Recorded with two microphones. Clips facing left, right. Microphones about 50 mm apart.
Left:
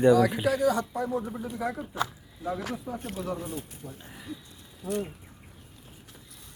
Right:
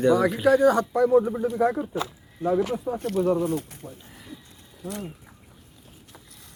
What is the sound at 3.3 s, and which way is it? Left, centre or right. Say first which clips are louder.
Speech: right 10 dB; right.